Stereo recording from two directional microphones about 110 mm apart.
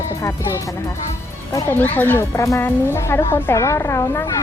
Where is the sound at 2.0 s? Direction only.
20° left (ahead or behind).